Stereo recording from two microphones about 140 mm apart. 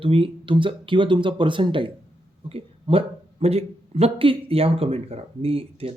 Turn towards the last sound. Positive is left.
turn(degrees=-40)  # may be behind; listen again after turning